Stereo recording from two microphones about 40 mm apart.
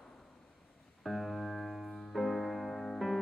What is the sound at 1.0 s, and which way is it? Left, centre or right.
Music, centre.